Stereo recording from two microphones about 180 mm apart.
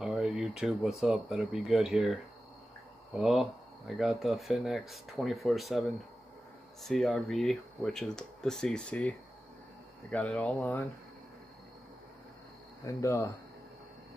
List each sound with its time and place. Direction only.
0.0 s speech: 5° right (ahead or behind)
10.1 s speech: 5° left (ahead or behind)
12.8 s speech: 15° left (ahead or behind)